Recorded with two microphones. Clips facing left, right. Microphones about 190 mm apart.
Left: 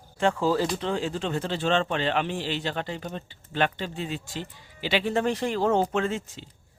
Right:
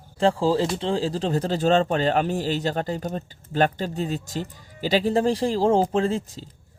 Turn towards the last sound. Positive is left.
turn(degrees=-35)  # may be behind; listen again after turning